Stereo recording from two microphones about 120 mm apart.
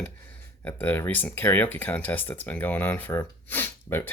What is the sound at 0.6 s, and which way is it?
Speech, 15° left (ahead or behind).